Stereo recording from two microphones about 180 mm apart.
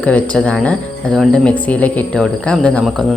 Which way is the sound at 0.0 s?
10° left (ahead or behind).